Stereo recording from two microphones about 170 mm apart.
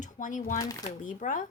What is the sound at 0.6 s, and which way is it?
Speech, 20° left (ahead or behind).